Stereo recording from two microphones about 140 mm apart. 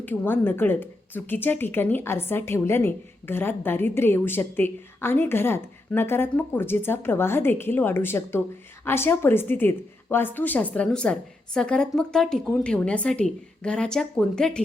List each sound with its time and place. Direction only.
0.0 s speech: 15° left (ahead or behind)